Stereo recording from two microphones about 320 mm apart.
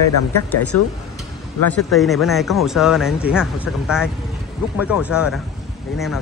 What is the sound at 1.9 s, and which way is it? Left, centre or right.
Speech, centre.